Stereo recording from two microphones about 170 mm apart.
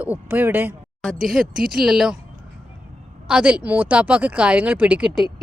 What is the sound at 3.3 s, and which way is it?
A woman's voice, 5° right (ahead or behind).